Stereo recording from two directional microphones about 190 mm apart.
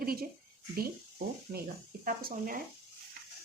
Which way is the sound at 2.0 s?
50° right (ahead or behind).